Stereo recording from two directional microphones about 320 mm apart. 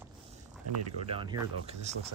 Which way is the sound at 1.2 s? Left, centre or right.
Centre.